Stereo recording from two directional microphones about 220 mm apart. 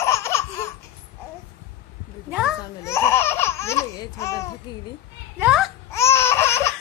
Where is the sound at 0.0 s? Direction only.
10° left (ahead or behind).